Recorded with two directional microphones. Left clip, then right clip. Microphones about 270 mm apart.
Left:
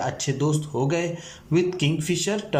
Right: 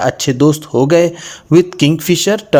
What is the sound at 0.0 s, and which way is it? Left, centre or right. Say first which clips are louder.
Speech: right 14 dB; right.